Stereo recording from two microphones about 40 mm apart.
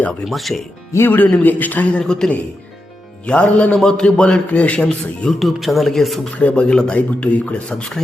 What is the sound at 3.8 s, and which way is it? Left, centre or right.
Speech, centre.